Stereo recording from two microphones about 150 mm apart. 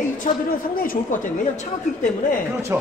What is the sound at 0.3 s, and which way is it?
A woman's voice, 55° left (ahead or behind).